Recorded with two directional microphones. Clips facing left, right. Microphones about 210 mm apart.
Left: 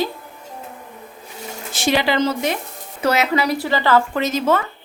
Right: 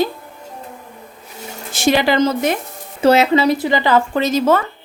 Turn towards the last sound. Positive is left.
turn(degrees=-35)  # may be behind; listen again after turning